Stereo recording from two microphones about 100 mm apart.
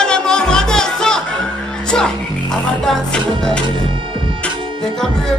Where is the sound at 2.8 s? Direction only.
5° left (ahead or behind).